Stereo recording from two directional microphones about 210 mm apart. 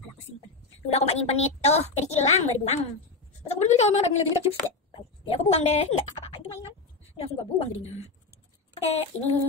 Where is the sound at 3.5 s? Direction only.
30° left (ahead or behind).